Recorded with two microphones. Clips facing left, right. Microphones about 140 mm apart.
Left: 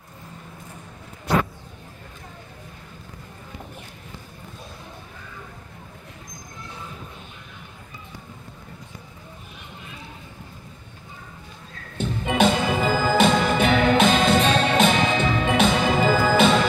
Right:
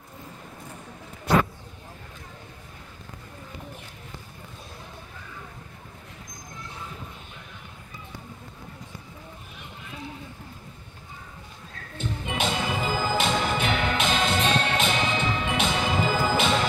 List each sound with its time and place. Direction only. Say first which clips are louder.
12.0 s music: left 9 dB; 45° left (ahead or behind)